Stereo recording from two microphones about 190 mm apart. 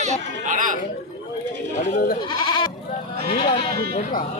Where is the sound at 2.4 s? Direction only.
25° left (ahead or behind).